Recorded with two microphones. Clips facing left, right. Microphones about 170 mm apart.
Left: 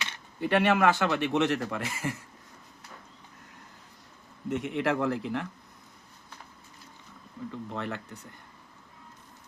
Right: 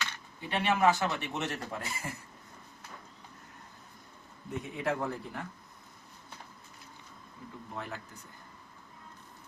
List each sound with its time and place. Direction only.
0.4 s speech: 70° left (ahead or behind); by 2.1 s 90° left
4.4 s a man's voice: 80° left
7.7 s speech: 70° left (ahead or behind)